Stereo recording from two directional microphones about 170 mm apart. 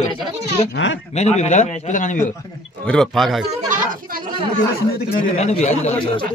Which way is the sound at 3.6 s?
50° right (ahead or behind).